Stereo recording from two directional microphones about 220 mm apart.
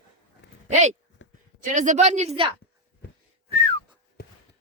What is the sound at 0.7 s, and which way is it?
Speech, 30° right (ahead or behind).